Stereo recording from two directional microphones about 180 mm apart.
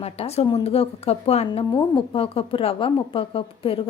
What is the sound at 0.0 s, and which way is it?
A woman's voice, 35° left (ahead or behind).